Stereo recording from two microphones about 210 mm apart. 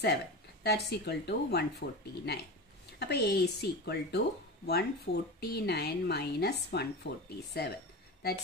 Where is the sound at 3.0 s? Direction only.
50° left (ahead or behind).